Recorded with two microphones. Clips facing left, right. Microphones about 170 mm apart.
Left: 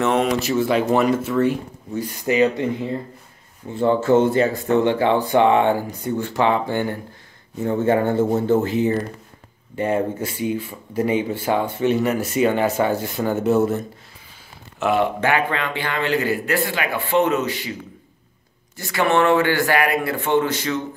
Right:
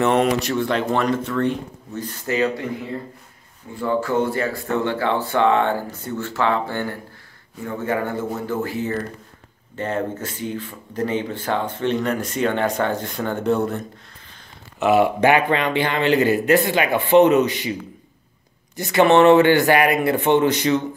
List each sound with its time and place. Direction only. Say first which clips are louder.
0.0 s speech: right 1 dB; centre (ahead or behind); by 2.6 s 20° left (ahead or behind)
3.7 s speech: left 5 dB; 25° left (ahead or behind); by 15.0 s 5° right (ahead or behind)
15.1 s speech: right 4 dB; 15° right (ahead or behind)
18.8 s speech: right 5 dB; 20° right (ahead or behind)